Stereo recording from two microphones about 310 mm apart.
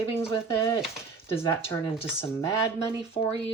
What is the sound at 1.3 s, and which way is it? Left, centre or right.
Speech, centre.